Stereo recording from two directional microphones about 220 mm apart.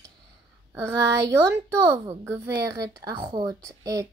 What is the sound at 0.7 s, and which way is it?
A child's voice, 15° right (ahead or behind).